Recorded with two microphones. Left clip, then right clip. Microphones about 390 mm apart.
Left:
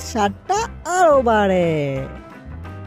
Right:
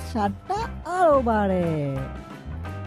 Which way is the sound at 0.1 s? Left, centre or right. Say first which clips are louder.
Left 7 dB; centre.